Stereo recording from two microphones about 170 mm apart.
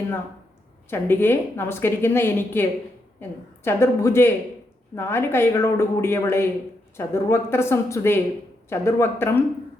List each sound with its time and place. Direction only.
0.9 s a woman's voice: 10° left (ahead or behind)